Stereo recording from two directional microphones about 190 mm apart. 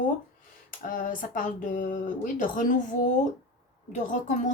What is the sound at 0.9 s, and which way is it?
Speech, 45° left (ahead or behind).